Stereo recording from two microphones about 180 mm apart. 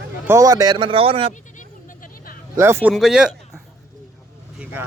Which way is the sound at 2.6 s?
10° right (ahead or behind).